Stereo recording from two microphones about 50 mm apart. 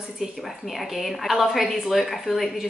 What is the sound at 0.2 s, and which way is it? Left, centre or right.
A woman's voice, centre.